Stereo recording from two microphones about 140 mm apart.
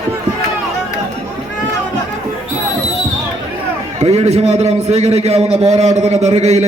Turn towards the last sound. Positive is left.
turn(degrees=-50)  # may be behind; listen again after turning